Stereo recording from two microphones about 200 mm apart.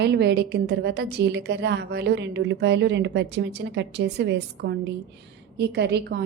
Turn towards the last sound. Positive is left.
turn(degrees=-55)  # may be behind; listen again after turning